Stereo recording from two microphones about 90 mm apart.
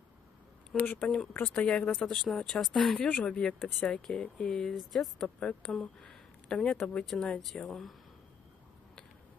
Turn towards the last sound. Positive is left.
turn(degrees=0)  # may be behind; listen again after turning